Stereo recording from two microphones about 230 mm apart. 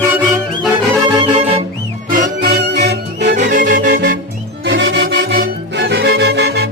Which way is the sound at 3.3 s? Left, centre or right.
Right.